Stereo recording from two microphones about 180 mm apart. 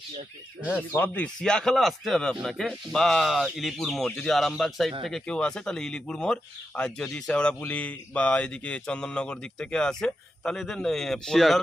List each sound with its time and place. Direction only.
0.7 s speech: 10° left (ahead or behind)